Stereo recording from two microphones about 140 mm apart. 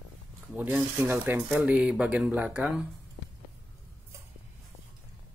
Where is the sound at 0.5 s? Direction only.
10° right (ahead or behind).